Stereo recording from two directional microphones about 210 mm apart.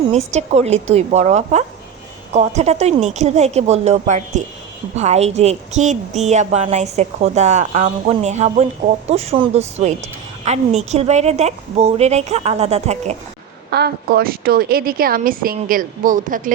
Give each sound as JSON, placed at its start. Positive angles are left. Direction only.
{"t": 0.1, "sound": "a woman's voice", "side_deg": -30}
{"t": 13.7, "sound": "a woman's voice", "side_deg": -50}